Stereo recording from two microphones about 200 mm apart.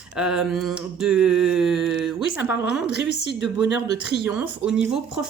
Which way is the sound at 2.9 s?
55° left (ahead or behind).